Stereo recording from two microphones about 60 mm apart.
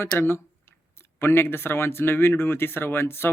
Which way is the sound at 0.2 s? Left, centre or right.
Left.